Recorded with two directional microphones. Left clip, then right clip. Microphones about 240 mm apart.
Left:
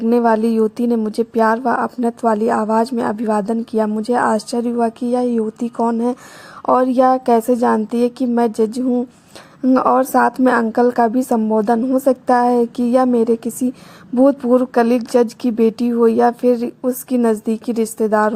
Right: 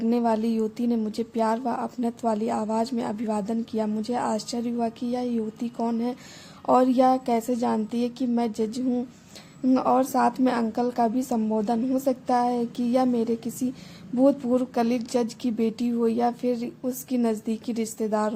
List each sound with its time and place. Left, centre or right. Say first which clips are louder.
0.0 s a woman's voice: left 10 dB; left